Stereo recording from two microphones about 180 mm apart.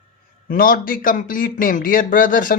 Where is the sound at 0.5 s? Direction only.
50° left (ahead or behind).